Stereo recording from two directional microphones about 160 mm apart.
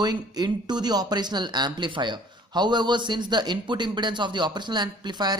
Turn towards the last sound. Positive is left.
turn(degrees=-25)  # may be behind; listen again after turning